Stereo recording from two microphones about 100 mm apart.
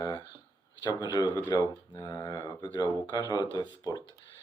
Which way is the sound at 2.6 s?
45° left (ahead or behind).